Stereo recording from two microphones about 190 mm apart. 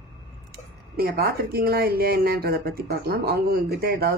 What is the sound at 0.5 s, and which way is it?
Speech, 55° right (ahead or behind).